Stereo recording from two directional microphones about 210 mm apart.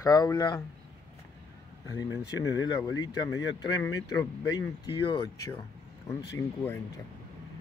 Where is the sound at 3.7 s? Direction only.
15° left (ahead or behind).